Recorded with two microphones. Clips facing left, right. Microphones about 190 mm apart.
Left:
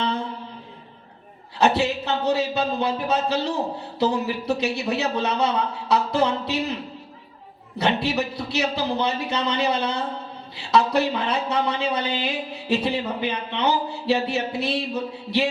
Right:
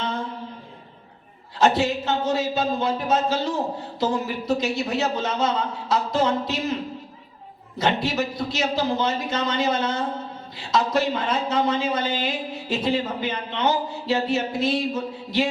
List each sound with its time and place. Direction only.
1.5 s speech: 65° left (ahead or behind)
7.8 s speech: 65° left (ahead or behind)